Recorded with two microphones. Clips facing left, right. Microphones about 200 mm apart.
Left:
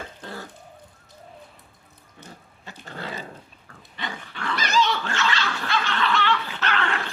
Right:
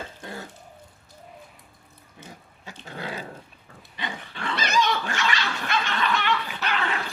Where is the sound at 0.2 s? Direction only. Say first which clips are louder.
Even; 15° right (ahead or behind).